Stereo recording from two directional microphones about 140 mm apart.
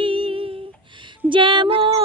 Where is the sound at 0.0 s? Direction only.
40° right (ahead or behind).